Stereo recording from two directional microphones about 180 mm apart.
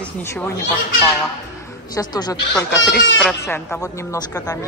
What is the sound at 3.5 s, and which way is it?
A woman's voice, 15° left (ahead or behind).